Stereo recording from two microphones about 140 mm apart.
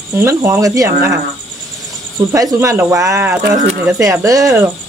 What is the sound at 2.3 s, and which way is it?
Speech, 25° right (ahead or behind).